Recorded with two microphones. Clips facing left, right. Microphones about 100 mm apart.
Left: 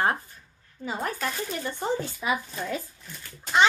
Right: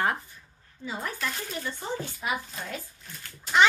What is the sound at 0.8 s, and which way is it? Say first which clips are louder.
Speech: left 3 dB; 50° left (ahead or behind).